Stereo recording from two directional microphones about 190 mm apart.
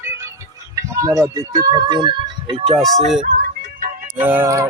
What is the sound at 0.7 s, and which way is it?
Speech, 15° right (ahead or behind).